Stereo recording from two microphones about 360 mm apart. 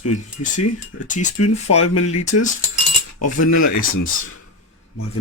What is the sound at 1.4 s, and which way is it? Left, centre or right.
Speech, left.